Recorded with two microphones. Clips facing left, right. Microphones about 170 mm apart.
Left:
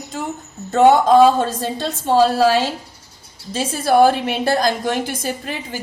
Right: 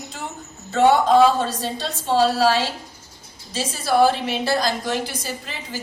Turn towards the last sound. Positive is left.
turn(degrees=55)  # may be behind; listen again after turning